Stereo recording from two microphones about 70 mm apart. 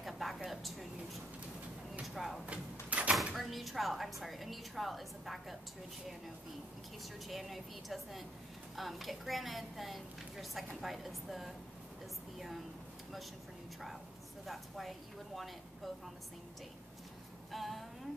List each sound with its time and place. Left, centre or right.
0.0 s a sound: centre
2.0 s speech: centre
2.5 s door: centre
3.3 s a woman's voice: centre
7.2 s a woman's voice: centre
14.4 s speech: centre
17.5 s a sound: centre